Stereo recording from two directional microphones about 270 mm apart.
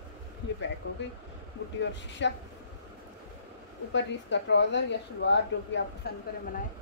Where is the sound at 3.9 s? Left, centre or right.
Left.